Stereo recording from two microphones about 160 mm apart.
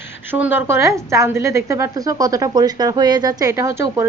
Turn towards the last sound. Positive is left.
turn(degrees=-20)  # may be behind; listen again after turning